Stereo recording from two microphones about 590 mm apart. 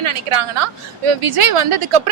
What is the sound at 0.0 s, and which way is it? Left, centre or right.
A woman's voice, right.